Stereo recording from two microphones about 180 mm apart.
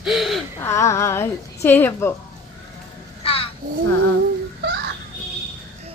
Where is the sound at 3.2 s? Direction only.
30° left (ahead or behind).